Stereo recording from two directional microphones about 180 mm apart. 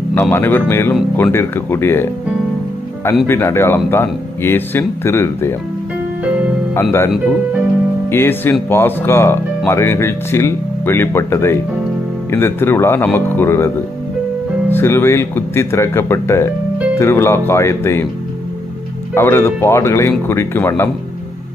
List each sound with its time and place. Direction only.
0.1 s speech: 10° left (ahead or behind)
3.3 s speech: 15° left (ahead or behind)
6.7 s speech: 15° left (ahead or behind)
8.1 s speech: 15° left (ahead or behind)
14.7 s speech: 10° left (ahead or behind)
19.1 s speech: 15° left (ahead or behind)